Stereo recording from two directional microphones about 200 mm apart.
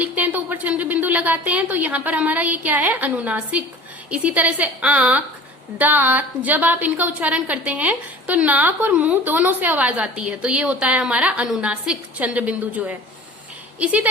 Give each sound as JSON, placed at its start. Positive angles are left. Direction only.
{"t": 0.0, "sound": "a woman's voice", "side_deg": -10}